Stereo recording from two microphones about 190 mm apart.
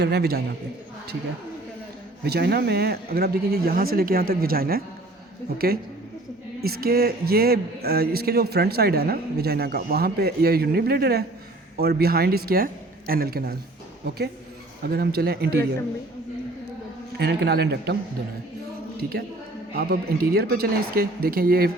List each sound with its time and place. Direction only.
0.0 s speech: 60° right (ahead or behind)
2.2 s speech: 55° right (ahead or behind)
14.8 s speech: 55° right (ahead or behind)
17.2 s speech: 60° right (ahead or behind)
19.7 s speech: 55° right (ahead or behind)